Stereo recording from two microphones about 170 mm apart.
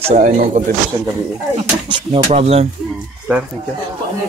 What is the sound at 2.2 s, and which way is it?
Speech, 35° right (ahead or behind).